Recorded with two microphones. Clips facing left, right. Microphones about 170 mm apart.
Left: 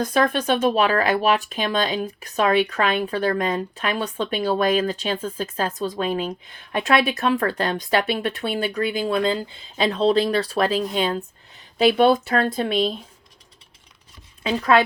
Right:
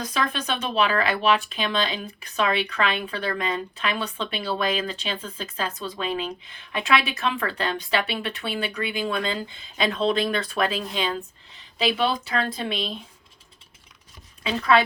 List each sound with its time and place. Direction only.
0.0 s speech: 50° left (ahead or behind)
14.4 s speech: 45° left (ahead or behind)